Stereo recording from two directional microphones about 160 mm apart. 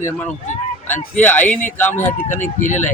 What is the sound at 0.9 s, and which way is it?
Speech, 10° left (ahead or behind).